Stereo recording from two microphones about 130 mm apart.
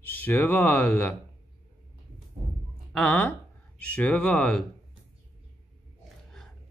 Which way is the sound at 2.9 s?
10° left (ahead or behind).